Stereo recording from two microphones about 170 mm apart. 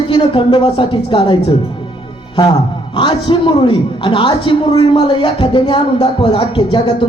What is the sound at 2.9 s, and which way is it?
A man's voice, 30° left (ahead or behind).